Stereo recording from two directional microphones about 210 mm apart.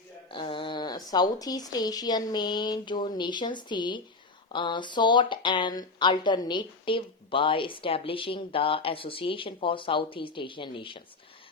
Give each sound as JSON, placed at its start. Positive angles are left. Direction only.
{"t": 0.3, "sound": "speech", "side_deg": 25}